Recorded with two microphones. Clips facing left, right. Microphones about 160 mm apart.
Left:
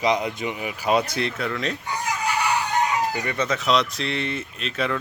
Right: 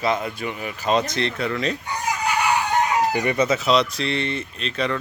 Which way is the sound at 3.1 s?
20° right (ahead or behind).